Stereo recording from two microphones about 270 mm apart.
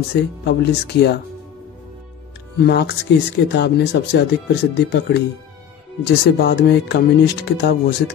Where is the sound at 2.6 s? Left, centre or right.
Left.